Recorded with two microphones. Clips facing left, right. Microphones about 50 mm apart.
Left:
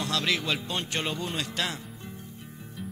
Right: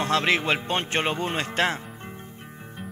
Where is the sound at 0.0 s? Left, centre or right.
Right.